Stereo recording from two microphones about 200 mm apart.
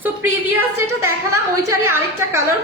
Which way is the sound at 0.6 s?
15° right (ahead or behind).